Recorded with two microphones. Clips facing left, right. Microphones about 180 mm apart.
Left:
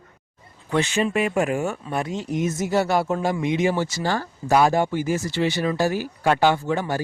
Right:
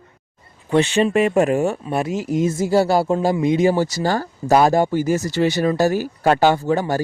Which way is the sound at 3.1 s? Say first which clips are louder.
Right 5 dB; 20° right (ahead or behind).